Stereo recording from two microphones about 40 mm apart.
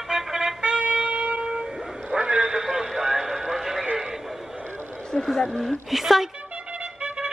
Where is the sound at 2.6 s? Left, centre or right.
Centre.